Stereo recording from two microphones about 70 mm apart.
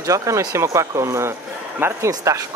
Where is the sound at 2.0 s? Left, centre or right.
Right.